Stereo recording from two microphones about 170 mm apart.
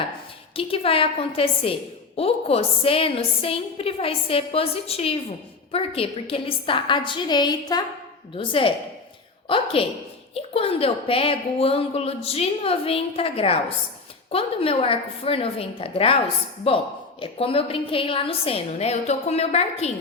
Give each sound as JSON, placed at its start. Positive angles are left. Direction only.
{"t": 0.5, "sound": "a woman's voice", "side_deg": 35}
{"t": 9.8, "sound": "a woman's voice", "side_deg": 35}